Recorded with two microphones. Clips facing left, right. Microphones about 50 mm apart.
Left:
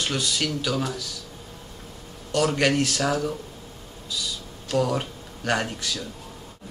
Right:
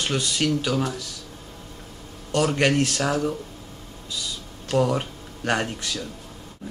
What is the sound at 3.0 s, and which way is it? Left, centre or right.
Speech, centre.